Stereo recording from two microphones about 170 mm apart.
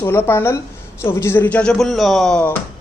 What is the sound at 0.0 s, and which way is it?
Speech, 15° left (ahead or behind).